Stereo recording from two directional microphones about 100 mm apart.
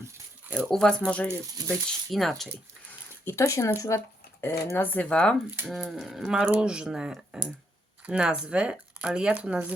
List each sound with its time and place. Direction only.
0.7 s speech: 5° left (ahead or behind)
3.2 s speech: 30° left (ahead or behind); by 9.7 s 10° right (ahead or behind)